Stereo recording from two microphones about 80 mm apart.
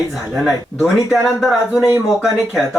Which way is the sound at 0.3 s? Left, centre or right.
Centre.